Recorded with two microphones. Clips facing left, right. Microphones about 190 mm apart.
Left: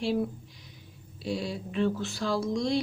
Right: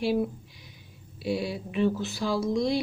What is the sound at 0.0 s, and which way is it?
Speech, 5° right (ahead or behind).